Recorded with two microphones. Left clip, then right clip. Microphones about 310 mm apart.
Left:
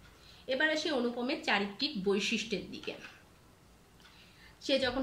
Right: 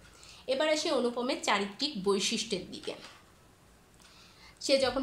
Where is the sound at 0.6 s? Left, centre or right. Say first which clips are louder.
Right 2 dB; centre.